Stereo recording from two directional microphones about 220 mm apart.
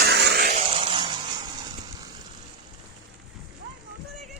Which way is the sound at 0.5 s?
25° right (ahead or behind).